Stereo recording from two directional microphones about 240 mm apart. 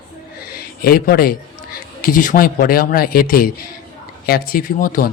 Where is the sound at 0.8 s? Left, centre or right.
Left.